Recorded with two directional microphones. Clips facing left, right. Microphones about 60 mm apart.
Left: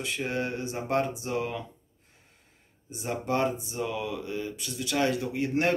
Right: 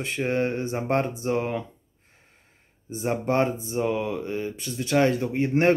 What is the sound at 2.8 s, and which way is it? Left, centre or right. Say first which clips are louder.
Speech: right 5 dB; right.